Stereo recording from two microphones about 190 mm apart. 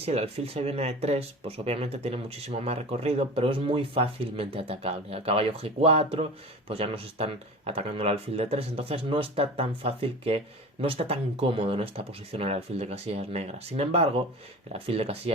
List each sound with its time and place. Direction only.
0.0 s speech: 35° right (ahead or behind)